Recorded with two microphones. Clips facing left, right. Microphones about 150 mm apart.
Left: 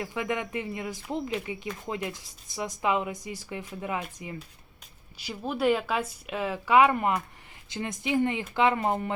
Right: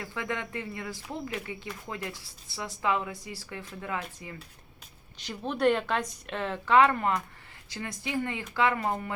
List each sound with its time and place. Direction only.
0.0 s speech: 15° left (ahead or behind)
5.1 s speech: 10° left (ahead or behind); by 9.1 s 25° left (ahead or behind)